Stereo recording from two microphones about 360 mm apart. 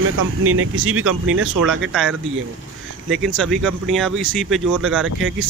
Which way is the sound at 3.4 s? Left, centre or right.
Centre.